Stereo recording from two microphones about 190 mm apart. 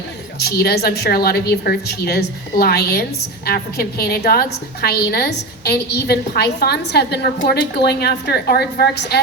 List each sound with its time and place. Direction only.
0.3 s a woman's voice: 55° left (ahead or behind)